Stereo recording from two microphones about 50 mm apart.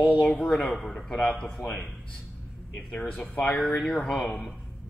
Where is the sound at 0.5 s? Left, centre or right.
Centre.